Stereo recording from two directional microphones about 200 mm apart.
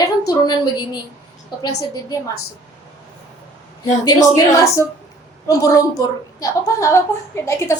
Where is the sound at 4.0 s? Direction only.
15° left (ahead or behind).